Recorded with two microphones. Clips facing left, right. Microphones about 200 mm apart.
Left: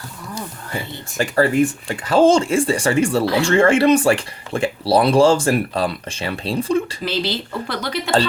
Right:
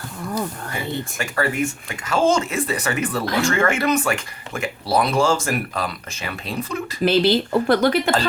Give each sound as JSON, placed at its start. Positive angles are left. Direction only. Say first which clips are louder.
{"t": 1.2, "sound": "speech", "louder": "left 8 dB", "side_deg": 30}
{"t": 7.0, "sound": "speech", "louder": "right 7 dB", "side_deg": -50}